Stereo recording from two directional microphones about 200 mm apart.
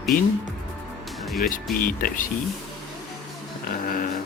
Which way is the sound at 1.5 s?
45° left (ahead or behind).